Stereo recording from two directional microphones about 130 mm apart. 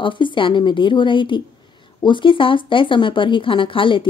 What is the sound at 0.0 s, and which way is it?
Speech, 40° left (ahead or behind).